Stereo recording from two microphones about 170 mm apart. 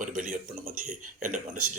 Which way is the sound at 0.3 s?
40° right (ahead or behind).